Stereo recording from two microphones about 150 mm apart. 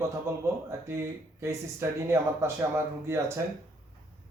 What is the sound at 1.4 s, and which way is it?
Speech, 15° right (ahead or behind).